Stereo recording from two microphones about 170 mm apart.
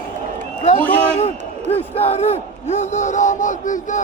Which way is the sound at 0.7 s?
10° left (ahead or behind).